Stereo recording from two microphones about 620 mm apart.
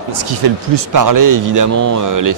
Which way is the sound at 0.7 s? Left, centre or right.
Right.